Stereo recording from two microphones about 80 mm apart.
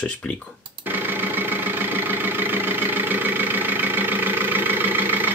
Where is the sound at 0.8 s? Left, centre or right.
Right.